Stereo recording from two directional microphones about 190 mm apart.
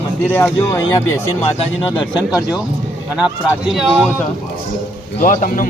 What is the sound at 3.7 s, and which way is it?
Speech, centre (ahead or behind).